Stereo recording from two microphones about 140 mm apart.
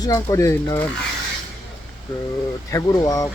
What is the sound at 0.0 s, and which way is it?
Speech, 25° left (ahead or behind).